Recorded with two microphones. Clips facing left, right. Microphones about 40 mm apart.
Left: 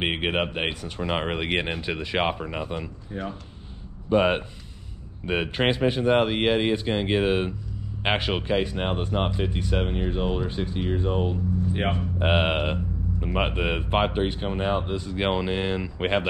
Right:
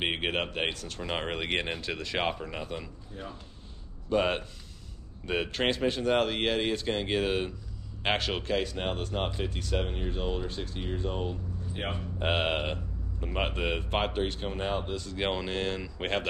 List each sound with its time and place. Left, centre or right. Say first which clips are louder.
0.0 s speech: left 5 dB; centre
3.1 s speech: left 10 dB; left
4.1 s speech: left 6 dB; centre